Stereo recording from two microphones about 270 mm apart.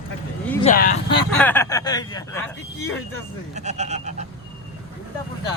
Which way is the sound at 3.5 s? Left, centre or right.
Right.